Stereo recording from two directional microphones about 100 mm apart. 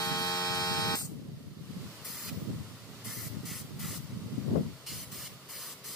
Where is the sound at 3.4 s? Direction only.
Centre (ahead or behind).